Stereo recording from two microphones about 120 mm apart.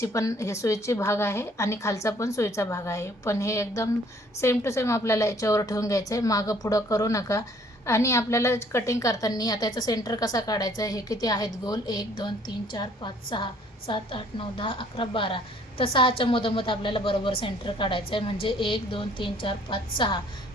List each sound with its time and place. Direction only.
0.0 s a woman's voice: 25° left (ahead or behind); by 20.1 s 45° left (ahead or behind)